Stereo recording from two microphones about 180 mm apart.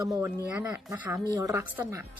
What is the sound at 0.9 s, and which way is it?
Speech, 15° right (ahead or behind).